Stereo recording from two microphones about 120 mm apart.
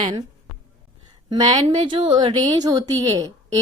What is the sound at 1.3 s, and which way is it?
A woman's voice, 35° right (ahead or behind).